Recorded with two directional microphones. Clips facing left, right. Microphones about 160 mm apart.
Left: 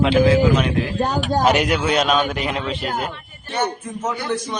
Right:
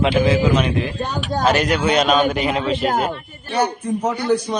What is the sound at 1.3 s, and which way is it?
Speech, 15° left (ahead or behind).